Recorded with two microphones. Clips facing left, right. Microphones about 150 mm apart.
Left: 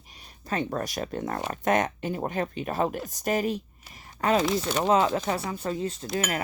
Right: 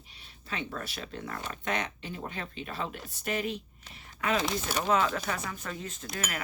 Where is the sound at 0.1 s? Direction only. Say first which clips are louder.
Left 8 dB; 45° left (ahead or behind).